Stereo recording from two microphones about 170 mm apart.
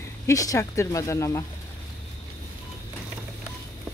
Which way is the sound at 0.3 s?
20° left (ahead or behind).